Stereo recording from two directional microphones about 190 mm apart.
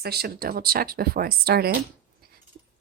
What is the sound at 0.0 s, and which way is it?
A woman's voice, 55° right (ahead or behind).